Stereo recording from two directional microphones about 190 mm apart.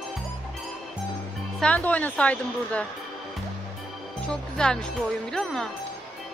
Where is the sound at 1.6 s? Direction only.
5° left (ahead or behind).